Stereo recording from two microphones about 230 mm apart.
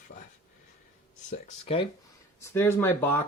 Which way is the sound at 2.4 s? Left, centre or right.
Centre.